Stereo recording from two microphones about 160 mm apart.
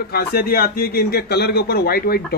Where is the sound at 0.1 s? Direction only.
75° left (ahead or behind).